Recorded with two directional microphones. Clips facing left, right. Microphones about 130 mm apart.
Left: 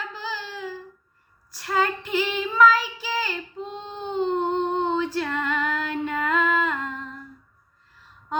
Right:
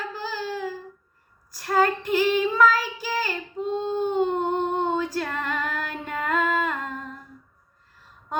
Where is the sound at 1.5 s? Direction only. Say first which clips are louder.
Right 3 dB; 45° right (ahead or behind).